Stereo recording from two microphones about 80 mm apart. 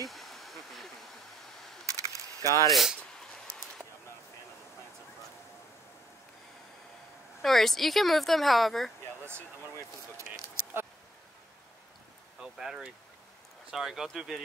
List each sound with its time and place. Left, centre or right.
0.0 s a sound: centre
2.4 s speech: left
2.7 s speech: centre
7.4 s speech: centre
10.1 s speech: right
12.4 s speech: centre